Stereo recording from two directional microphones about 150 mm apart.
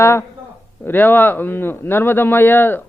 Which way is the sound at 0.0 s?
15° left (ahead or behind).